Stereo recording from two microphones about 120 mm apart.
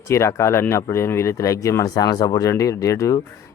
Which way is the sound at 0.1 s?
25° left (ahead or behind).